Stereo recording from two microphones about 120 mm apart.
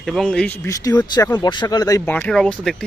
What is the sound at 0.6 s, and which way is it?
Speech, 30° left (ahead or behind).